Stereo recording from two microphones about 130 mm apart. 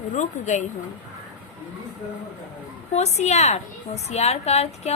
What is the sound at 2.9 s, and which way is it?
A woman's voice, 55° left (ahead or behind).